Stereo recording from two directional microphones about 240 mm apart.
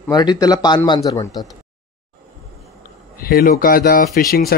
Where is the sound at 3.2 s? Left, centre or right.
Left.